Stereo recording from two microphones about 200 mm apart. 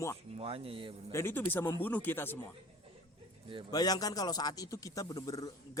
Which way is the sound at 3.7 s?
20° left (ahead or behind).